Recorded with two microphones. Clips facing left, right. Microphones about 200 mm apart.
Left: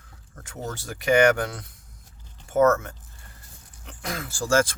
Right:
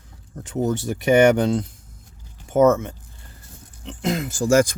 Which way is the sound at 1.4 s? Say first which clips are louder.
Right 11 dB; 25° right (ahead or behind).